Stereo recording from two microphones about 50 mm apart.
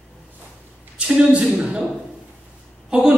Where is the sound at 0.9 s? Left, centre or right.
Right.